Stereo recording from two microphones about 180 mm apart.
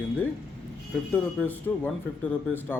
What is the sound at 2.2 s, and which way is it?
Speech, 10° left (ahead or behind).